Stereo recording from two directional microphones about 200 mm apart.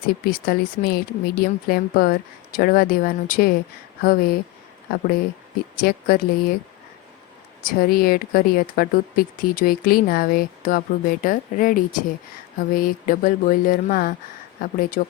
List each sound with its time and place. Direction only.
0.3 s speech: 50° left (ahead or behind)
5.7 s speech: 45° left (ahead or behind)
7.7 s speech: 50° left (ahead or behind)